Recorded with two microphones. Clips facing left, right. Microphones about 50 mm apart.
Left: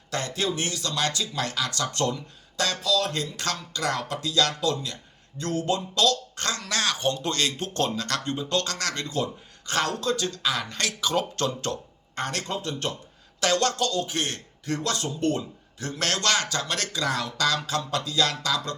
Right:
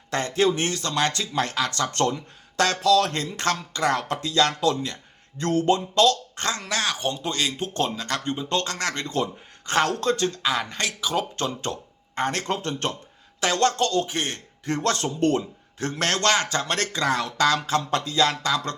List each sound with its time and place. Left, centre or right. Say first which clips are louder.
0.1 s speech: right 6 dB; right
3.2 s speech: right 4 dB; right
10.4 s speech: right 2 dB; centre
11.3 s speech: even; right
13.4 s speech: right 2 dB; right
14.1 s speech: right 1 dB; right
14.7 s speech: right 4 dB; right
15.4 s speech: right 4 dB; right